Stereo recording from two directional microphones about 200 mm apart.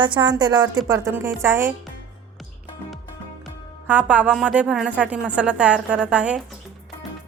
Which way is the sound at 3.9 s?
5° right (ahead or behind).